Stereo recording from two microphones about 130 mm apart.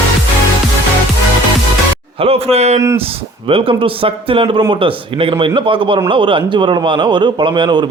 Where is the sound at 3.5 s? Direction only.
45° right (ahead or behind).